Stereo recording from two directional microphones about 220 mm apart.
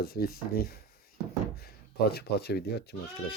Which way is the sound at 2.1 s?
45° left (ahead or behind).